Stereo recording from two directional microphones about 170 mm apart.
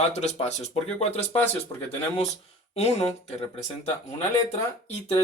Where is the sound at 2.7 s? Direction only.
40° left (ahead or behind).